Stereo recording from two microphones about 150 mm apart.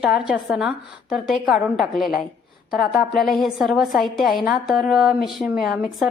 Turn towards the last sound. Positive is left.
turn(degrees=-5)  # may be behind; listen again after turning